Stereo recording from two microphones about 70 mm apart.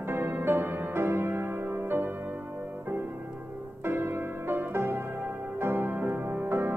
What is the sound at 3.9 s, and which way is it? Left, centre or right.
Music, right.